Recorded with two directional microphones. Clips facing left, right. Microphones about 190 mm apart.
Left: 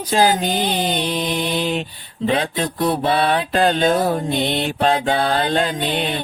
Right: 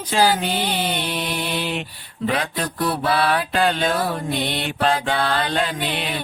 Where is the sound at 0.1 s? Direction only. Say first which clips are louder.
Left 2 dB; 40° left (ahead or behind).